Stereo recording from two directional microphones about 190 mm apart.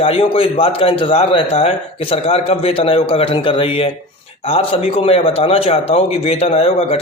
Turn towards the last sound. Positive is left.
turn(degrees=30)  # may be behind; listen again after turning